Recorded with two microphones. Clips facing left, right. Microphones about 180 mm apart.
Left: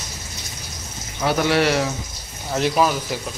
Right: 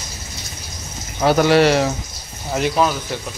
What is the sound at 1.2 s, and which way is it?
Speech, 40° right (ahead or behind).